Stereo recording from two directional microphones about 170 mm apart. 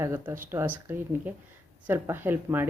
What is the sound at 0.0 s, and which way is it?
Speech, 15° right (ahead or behind).